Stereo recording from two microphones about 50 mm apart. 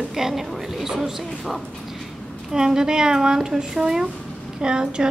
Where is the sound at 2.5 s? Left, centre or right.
Centre.